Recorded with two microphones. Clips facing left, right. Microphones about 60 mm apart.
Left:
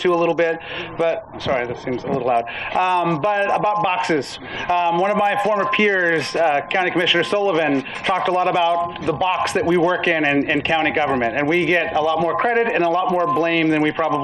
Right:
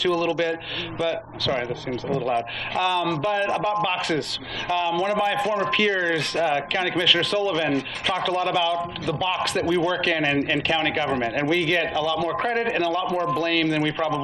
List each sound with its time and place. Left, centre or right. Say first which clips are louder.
0.0 s a man's voice: left 6 dB; left